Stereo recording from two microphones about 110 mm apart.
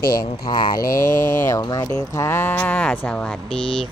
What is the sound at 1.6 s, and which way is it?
Speech, 35° left (ahead or behind).